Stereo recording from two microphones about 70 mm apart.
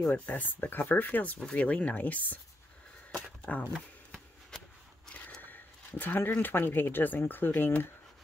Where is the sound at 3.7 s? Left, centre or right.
Centre.